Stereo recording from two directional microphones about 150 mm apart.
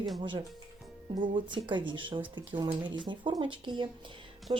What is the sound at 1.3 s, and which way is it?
A woman's voice, 30° right (ahead or behind).